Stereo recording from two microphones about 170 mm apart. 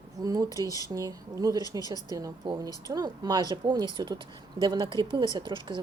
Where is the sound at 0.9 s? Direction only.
20° right (ahead or behind).